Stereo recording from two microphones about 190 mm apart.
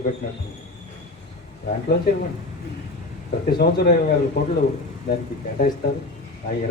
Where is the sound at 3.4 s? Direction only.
55° left (ahead or behind).